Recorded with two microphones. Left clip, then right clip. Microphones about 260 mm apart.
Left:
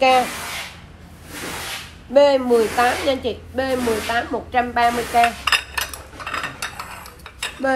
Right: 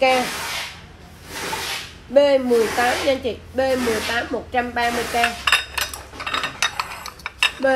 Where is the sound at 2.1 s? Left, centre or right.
Centre.